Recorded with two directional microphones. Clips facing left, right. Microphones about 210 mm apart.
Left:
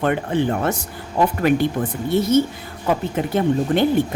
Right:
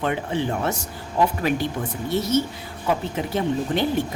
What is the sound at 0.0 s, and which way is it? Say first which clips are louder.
A woman's voice: left 5 dB; 55° left (ahead or behind).